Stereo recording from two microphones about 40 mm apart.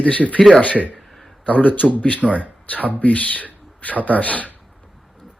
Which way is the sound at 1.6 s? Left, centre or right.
Left.